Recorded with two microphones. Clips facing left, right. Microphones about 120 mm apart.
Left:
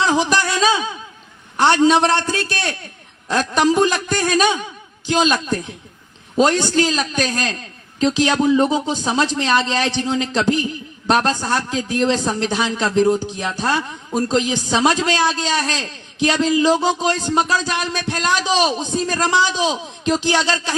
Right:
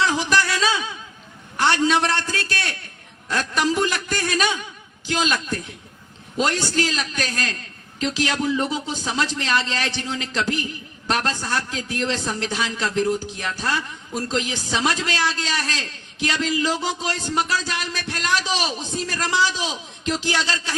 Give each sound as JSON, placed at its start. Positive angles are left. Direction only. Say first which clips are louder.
{"t": 0.0, "sound": "speech", "louder": "left 3 dB", "side_deg": 20}